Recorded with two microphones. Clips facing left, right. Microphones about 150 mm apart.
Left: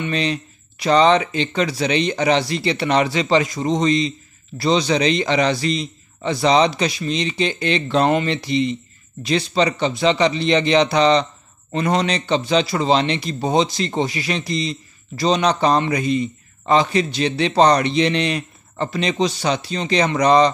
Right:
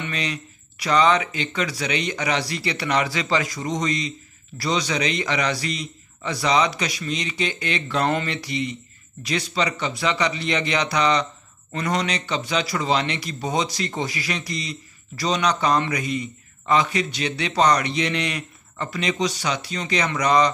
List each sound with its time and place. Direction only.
0.0 s a man's voice: 30° left (ahead or behind)